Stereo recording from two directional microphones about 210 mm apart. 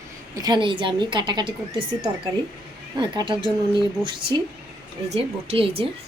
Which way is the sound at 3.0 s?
20° right (ahead or behind).